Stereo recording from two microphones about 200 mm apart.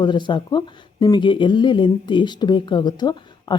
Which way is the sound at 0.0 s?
25° left (ahead or behind).